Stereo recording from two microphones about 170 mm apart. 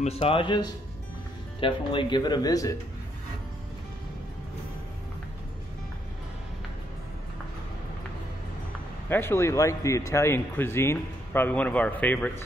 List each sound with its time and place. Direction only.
0.0 s speech: 35° left (ahead or behind)
9.1 s speech: 15° left (ahead or behind)